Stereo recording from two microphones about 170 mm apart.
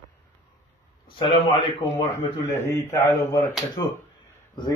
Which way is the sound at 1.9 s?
15° left (ahead or behind).